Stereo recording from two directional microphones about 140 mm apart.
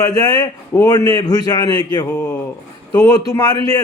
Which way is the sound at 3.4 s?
30° left (ahead or behind).